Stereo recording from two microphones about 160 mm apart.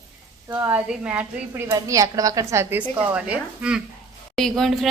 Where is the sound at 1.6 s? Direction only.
20° right (ahead or behind).